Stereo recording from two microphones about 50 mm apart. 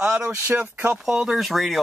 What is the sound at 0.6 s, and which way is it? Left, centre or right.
Speech, right.